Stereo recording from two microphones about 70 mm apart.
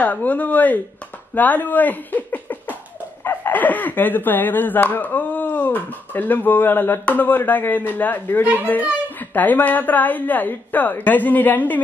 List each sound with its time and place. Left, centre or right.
0.0 s speech: left